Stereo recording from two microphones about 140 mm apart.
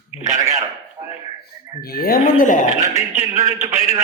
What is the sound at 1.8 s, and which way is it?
Speech, 90° left.